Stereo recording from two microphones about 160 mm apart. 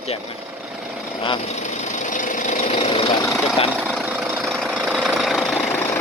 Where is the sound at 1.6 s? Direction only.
50° left (ahead or behind).